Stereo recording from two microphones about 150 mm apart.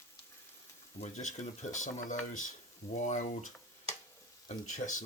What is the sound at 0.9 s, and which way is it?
Speech, 50° left (ahead or behind).